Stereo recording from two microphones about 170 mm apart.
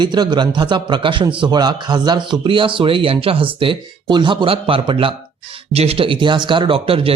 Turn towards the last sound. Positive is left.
turn(degrees=-35)  # may be behind; listen again after turning